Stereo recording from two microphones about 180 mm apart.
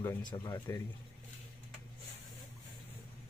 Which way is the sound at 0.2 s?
25° left (ahead or behind).